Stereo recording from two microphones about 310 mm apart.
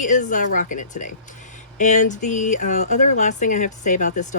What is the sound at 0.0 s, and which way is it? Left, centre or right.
Speech, left.